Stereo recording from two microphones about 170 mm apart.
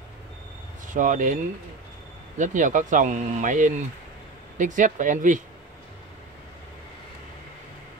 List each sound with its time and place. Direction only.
0.8 s speech: 50° right (ahead or behind)